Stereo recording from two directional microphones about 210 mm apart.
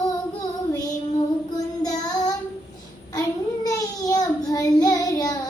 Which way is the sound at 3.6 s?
15° left (ahead or behind).